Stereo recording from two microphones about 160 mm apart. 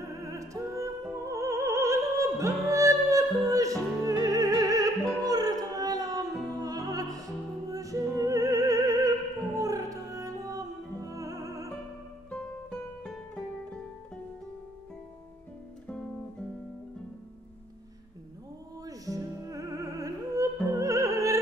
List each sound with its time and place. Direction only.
0.0 s music: 20° right (ahead or behind)
12.3 s music: 5° left (ahead or behind)
18.9 s music: 20° right (ahead or behind)